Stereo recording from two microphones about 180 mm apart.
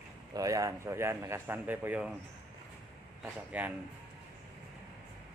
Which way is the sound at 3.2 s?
10° right (ahead or behind).